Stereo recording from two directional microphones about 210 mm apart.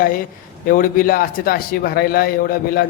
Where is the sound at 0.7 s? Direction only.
45° left (ahead or behind).